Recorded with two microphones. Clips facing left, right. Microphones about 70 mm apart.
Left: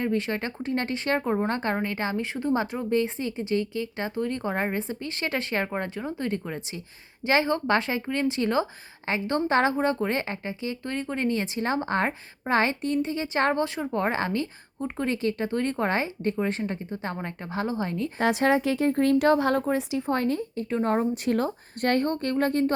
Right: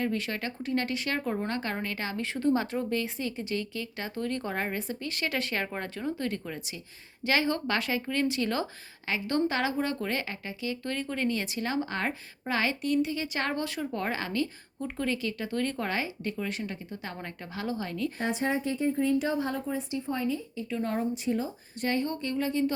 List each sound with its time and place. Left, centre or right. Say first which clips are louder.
0.0 s a woman's voice: left 4 dB; left
18.2 s speech: left 9 dB; left
21.2 s a woman's voice: left 5 dB; left